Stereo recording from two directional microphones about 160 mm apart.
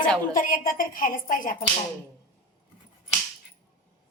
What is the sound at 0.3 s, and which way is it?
A woman's voice, 60° left (ahead or behind).